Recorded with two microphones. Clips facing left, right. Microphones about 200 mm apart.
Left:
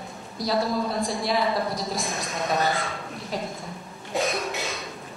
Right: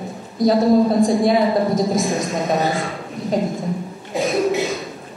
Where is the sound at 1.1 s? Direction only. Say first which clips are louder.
Right 9 dB; 50° right (ahead or behind).